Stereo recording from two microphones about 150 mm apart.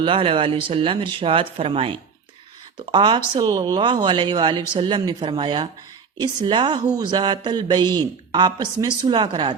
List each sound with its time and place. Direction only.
0.0 s speech: 40° right (ahead or behind)